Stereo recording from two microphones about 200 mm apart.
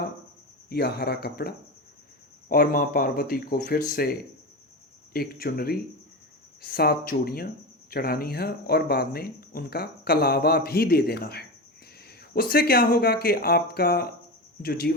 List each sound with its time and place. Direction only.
0.7 s speech: 55° left (ahead or behind)